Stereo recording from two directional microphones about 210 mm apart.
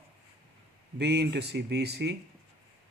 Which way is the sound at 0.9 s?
50° right (ahead or behind).